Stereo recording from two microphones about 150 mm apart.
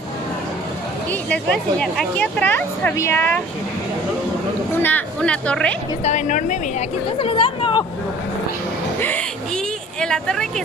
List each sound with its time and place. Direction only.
1.3 s speech: 5° left (ahead or behind)
4.8 s speech: 10° left (ahead or behind)
6.0 s a woman's voice: 55° left (ahead or behind)
7.2 s speech: 35° left (ahead or behind)
9.9 s speech: 5° left (ahead or behind)